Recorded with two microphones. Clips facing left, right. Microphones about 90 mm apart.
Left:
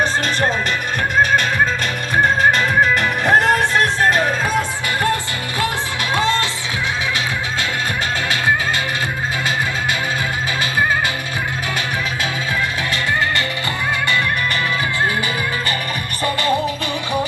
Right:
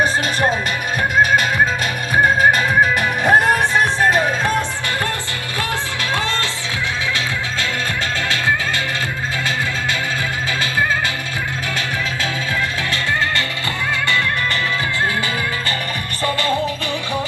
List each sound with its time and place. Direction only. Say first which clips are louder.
2.1 s music: right 1 dB; 10° right (ahead or behind)
6.1 s music: left 5 dB; 20° left (ahead or behind)